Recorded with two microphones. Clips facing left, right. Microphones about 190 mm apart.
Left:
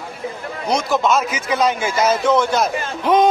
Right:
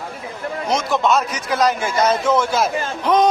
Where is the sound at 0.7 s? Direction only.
Centre (ahead or behind).